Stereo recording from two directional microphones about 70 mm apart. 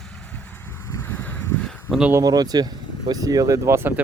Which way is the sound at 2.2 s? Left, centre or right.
Right.